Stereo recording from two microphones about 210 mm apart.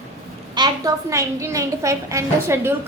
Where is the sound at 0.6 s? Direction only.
20° right (ahead or behind).